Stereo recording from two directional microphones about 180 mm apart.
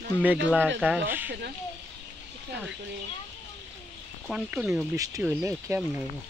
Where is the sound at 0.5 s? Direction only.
10° right (ahead or behind).